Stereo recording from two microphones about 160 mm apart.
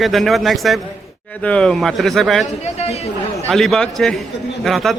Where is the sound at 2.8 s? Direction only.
40° left (ahead or behind).